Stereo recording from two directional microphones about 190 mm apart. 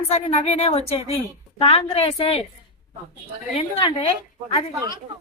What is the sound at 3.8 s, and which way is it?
Speech, 30° left (ahead or behind).